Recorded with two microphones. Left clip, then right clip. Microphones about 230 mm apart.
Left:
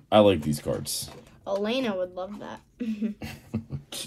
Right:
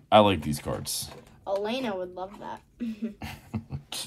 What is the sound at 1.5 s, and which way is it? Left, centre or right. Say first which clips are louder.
Speech: left 2 dB; left.